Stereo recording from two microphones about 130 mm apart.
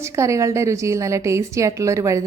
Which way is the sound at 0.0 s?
25° right (ahead or behind).